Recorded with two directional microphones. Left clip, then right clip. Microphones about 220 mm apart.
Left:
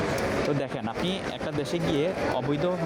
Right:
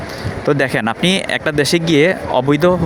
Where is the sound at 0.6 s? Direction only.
40° right (ahead or behind).